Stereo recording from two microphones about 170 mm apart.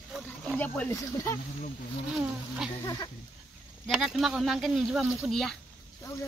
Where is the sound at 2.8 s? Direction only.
20° left (ahead or behind).